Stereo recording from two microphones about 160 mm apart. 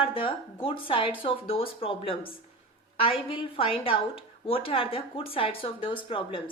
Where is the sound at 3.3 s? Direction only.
35° left (ahead or behind).